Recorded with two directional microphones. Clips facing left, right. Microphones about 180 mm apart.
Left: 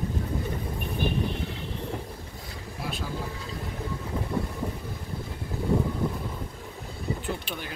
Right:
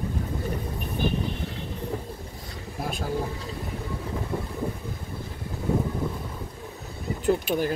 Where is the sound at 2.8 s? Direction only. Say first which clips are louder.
Right 3 dB; 45° right (ahead or behind).